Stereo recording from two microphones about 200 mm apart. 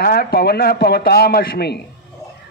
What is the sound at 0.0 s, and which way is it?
A man's voice, 50° left (ahead or behind).